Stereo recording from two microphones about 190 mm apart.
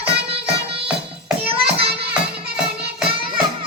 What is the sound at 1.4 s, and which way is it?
Children playing, 30° right (ahead or behind).